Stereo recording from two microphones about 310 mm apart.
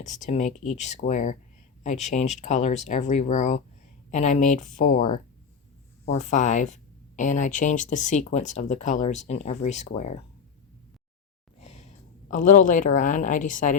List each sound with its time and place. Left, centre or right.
0.0 s speech: left
6.1 s speech: left
12.3 s speech: left